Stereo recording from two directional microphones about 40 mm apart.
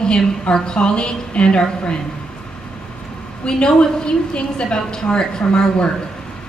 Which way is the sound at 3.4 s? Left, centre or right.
Left.